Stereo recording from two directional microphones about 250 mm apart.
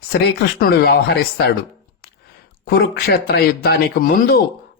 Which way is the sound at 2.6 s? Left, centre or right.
Left.